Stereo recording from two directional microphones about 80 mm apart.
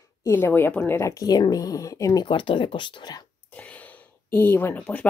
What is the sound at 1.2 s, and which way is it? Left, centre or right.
Speech, left.